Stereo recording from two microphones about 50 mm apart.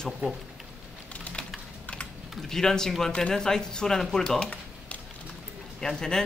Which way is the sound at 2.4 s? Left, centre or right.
Centre.